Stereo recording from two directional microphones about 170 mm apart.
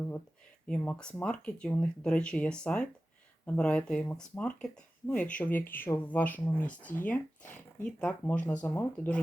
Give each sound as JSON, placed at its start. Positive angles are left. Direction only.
{"t": 0.7, "sound": "speech", "side_deg": 5}